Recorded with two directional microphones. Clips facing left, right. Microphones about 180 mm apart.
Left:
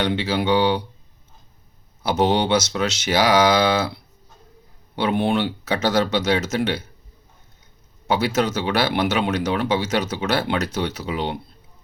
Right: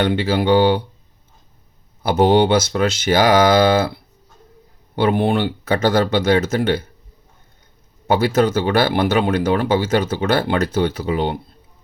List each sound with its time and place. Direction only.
0.0 s speech: 50° right (ahead or behind)
2.0 s speech: 55° right (ahead or behind)
4.9 s speech: 55° right (ahead or behind)
8.0 s speech: 55° right (ahead or behind)